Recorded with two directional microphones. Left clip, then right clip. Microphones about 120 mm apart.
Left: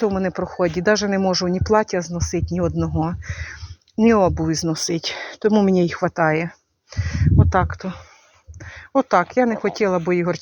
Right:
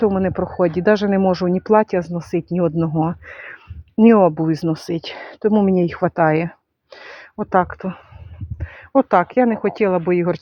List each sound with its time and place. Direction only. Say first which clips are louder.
0.0 s speech: right 3 dB; 35° right (ahead or behind)
4.7 s speech: left 1 dB; 20° right (ahead or behind)
5.9 s speech: right 2 dB; 35° right (ahead or behind)
10.1 s speech: right 2 dB; 35° right (ahead or behind)